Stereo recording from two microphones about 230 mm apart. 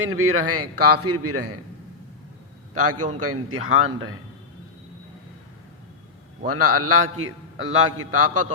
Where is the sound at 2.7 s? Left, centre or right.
Right.